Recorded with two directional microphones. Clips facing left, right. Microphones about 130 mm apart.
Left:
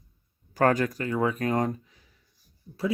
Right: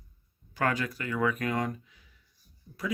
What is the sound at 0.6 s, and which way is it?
Speech, 45° left (ahead or behind).